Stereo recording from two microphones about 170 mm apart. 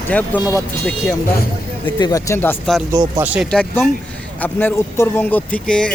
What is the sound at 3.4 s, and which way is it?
Speech, 5° left (ahead or behind).